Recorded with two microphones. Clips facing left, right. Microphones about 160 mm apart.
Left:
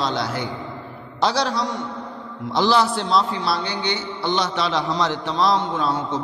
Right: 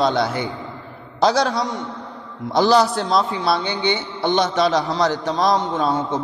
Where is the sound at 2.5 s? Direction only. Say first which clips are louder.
Right 3 dB; 45° right (ahead or behind).